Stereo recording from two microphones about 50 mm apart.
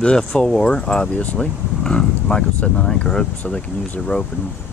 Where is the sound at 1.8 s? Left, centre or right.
Centre.